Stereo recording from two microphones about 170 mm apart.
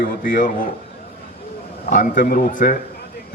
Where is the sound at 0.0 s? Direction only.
50° left (ahead or behind).